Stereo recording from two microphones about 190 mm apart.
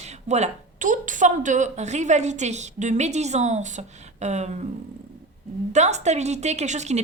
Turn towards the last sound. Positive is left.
turn(degrees=-35)  # may be behind; listen again after turning